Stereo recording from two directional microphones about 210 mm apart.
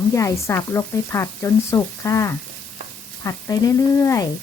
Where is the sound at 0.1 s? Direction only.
15° left (ahead or behind).